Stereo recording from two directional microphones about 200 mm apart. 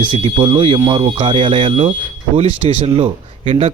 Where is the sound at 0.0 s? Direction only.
25° right (ahead or behind).